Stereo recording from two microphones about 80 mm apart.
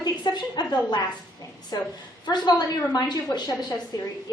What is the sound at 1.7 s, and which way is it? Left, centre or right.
A woman's voice, left.